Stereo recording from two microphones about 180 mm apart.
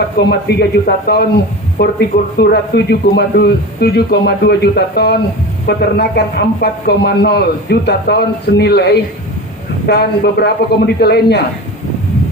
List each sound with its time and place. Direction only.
0.2 s a man's voice: 70° left (ahead or behind)